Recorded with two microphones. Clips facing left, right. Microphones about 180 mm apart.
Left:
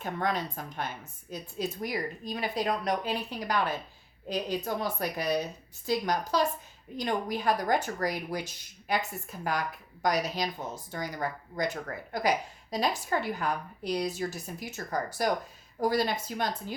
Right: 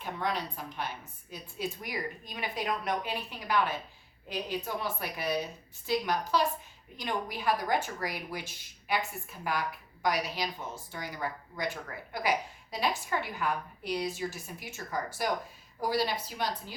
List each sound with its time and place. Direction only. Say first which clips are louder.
0.0 s a woman's voice: left 3 dB; 45° left (ahead or behind)